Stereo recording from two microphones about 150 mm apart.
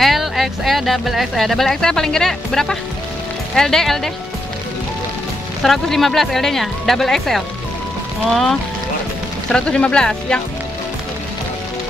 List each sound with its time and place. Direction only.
0.0 s speech: centre (ahead or behind)
5.6 s speech: centre (ahead or behind)